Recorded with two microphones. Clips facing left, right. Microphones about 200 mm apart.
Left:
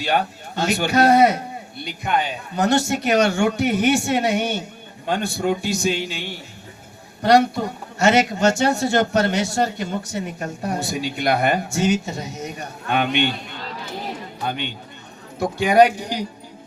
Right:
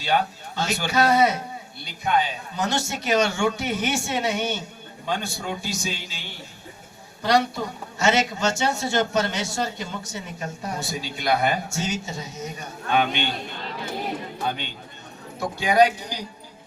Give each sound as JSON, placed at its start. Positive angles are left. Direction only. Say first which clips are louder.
{"t": 0.0, "sound": "speech", "louder": "left 2 dB", "side_deg": 55}
{"t": 15.4, "sound": "a man's voice", "louder": "left 4 dB", "side_deg": 55}